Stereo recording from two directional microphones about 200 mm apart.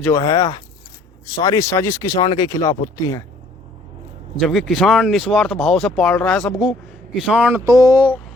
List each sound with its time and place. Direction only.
0.0 s speech: 15° left (ahead or behind)
4.4 s speech: centre (ahead or behind)